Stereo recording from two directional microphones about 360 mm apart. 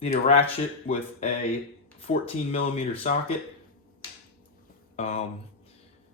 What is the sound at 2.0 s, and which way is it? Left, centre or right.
Speech, centre.